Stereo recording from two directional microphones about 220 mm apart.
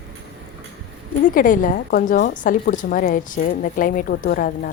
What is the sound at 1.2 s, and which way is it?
A woman's voice, 40° left (ahead or behind).